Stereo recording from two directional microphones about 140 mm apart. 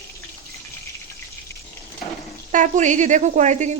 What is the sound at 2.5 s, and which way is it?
Speech, 60° right (ahead or behind).